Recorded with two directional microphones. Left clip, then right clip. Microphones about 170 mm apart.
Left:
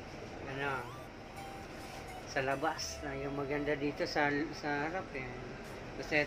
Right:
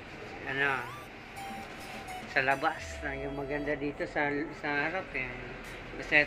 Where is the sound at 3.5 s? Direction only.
20° left (ahead or behind).